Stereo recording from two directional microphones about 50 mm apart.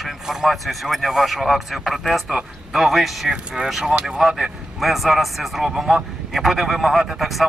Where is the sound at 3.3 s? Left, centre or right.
Centre.